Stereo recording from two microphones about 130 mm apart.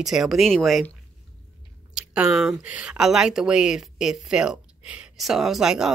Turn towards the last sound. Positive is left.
turn(degrees=-5)  # may be behind; listen again after turning